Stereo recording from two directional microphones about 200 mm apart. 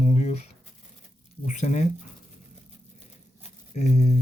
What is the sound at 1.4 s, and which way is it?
Speech, 35° left (ahead or behind).